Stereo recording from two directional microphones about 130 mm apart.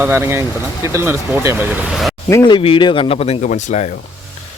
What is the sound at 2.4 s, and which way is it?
Speech, 40° left (ahead or behind).